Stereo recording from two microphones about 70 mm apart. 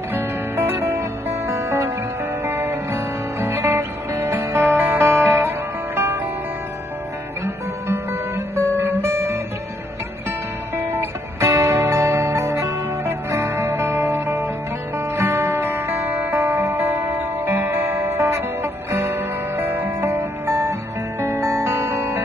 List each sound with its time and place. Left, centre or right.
0.1 s music: right
1.5 s music: right
7.4 s music: right
8.7 s guitar: right
10.8 s music: right